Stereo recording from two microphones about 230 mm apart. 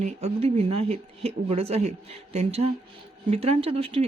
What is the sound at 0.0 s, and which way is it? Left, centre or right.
Speech, right.